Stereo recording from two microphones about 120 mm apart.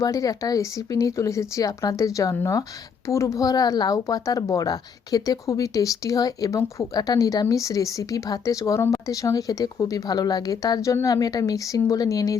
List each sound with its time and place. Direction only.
0.0 s speech: 30° left (ahead or behind)